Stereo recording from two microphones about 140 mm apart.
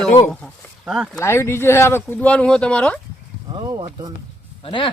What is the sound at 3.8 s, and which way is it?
Speech, 40° right (ahead or behind).